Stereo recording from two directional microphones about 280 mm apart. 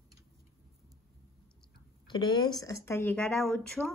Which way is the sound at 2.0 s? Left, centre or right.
Centre.